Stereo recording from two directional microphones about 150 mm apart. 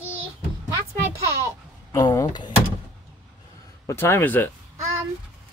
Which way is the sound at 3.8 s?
15° left (ahead or behind).